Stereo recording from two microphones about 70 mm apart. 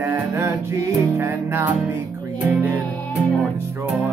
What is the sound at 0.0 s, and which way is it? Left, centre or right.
Music, right.